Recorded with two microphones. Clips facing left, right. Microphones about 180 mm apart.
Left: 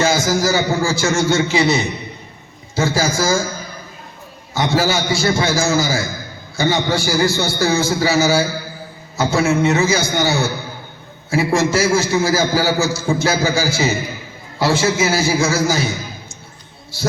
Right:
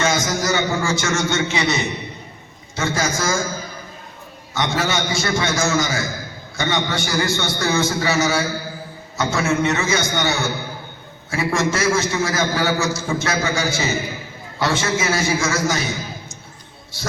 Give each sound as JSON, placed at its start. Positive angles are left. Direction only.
{"t": 0.0, "sound": "a man's voice", "side_deg": 30}
{"t": 4.5, "sound": "a man's voice", "side_deg": 30}